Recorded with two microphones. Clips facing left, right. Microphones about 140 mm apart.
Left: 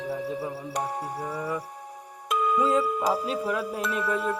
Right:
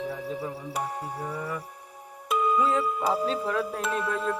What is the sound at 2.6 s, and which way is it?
Speech, 15° left (ahead or behind).